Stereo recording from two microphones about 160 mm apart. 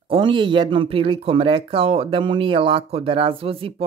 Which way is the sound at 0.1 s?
30° right (ahead or behind).